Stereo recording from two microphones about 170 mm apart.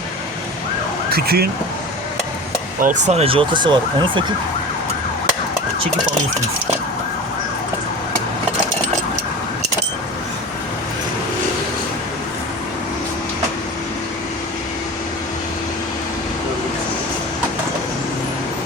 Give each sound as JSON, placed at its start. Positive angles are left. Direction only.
{"t": 1.1, "sound": "speech", "side_deg": -65}
{"t": 2.8, "sound": "speech", "side_deg": -45}